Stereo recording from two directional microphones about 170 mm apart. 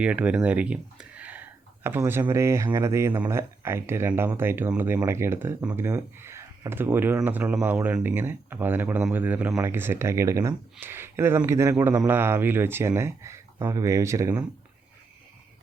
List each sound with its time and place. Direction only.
0.0 s speech: 10° right (ahead or behind)